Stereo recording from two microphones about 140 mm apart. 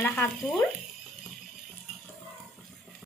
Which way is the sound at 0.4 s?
Centre (ahead or behind).